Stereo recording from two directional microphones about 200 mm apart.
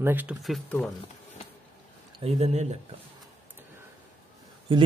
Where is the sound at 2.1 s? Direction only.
30° right (ahead or behind).